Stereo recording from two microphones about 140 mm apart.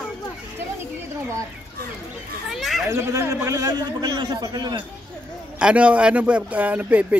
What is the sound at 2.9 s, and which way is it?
A man's voice, 20° right (ahead or behind).